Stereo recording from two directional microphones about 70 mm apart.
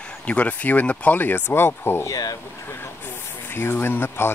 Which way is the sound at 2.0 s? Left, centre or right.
Left.